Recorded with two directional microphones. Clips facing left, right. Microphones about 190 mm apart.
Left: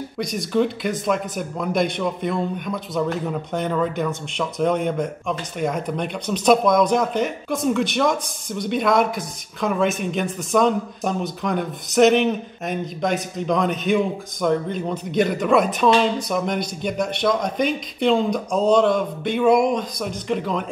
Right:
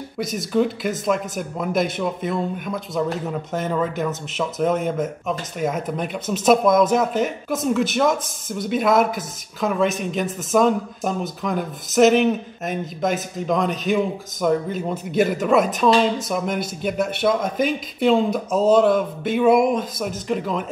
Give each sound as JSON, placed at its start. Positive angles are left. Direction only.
{"t": 0.2, "sound": "speech", "side_deg": 0}